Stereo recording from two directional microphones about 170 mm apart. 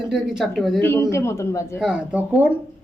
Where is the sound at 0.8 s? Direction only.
15° left (ahead or behind).